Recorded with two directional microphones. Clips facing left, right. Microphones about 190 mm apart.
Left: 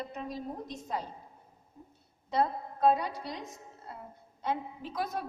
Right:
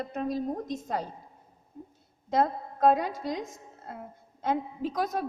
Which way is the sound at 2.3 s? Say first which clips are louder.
Right 3 dB; 45° right (ahead or behind).